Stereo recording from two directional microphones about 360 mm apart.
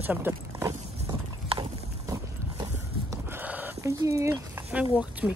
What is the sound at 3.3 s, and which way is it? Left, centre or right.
Speech, centre.